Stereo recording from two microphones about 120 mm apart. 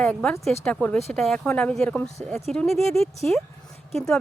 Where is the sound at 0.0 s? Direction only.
10° left (ahead or behind).